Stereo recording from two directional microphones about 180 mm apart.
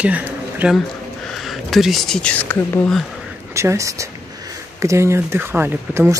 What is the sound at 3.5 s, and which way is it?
Speech, 15° right (ahead or behind).